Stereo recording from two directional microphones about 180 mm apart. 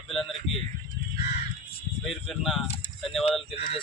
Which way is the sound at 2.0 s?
Centre (ahead or behind).